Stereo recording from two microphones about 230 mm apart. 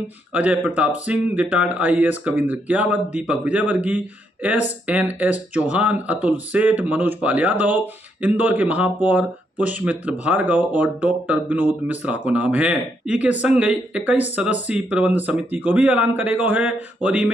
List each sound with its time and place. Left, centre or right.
0.3 s speech: centre